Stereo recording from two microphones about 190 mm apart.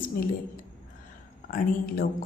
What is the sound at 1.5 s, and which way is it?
Speech, 50° left (ahead or behind).